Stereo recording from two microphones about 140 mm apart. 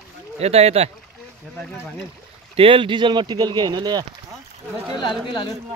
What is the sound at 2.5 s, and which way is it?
Speech, 40° right (ahead or behind).